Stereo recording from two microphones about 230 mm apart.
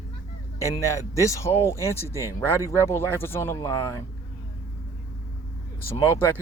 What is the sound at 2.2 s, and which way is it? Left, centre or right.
Speech, centre.